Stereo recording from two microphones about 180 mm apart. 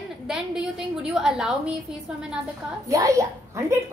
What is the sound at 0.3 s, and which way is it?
A woman's voice, centre (ahead or behind).